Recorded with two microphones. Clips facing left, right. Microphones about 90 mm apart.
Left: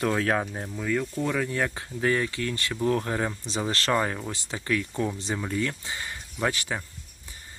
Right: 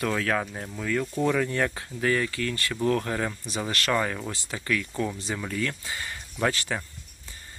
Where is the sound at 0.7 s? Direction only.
10° left (ahead or behind).